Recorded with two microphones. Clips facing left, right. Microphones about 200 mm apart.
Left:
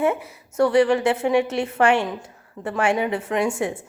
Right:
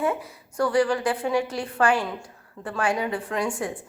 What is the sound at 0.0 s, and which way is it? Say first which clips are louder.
A woman's voice: left 4 dB; 25° left (ahead or behind).